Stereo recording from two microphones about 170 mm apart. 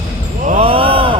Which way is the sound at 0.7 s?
35° right (ahead or behind).